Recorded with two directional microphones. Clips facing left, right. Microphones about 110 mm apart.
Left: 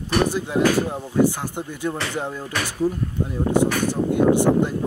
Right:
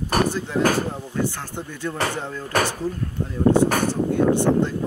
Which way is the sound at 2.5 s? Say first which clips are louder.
Right 8 dB; 45° right (ahead or behind).